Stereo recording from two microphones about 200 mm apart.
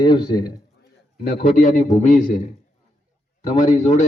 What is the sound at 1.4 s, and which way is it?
A man's voice, 35° left (ahead or behind).